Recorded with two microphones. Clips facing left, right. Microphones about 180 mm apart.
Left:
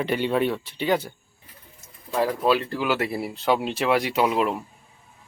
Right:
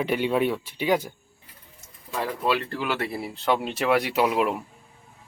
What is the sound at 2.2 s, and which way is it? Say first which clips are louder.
Speech: left 4 dB; 10° left (ahead or behind).